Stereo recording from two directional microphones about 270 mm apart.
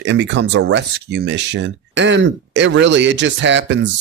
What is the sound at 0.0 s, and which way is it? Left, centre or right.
Speech, right.